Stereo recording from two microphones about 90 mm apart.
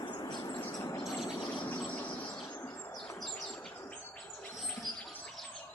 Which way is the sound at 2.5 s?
25° left (ahead or behind).